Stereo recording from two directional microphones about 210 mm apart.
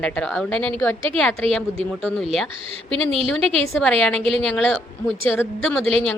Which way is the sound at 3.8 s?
5° left (ahead or behind).